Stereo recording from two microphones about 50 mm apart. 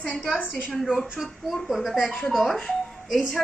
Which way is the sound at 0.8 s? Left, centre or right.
Centre.